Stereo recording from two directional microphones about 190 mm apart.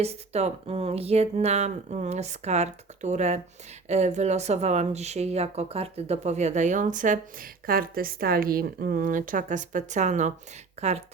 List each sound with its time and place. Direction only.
0.0 s speech: 35° right (ahead or behind)